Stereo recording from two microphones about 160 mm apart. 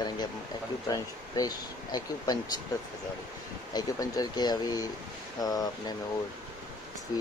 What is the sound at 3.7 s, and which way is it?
Speech, 25° left (ahead or behind).